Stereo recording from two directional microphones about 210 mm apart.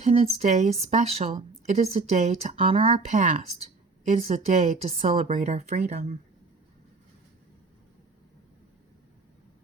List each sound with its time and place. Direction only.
0.0 s speech: 30° right (ahead or behind)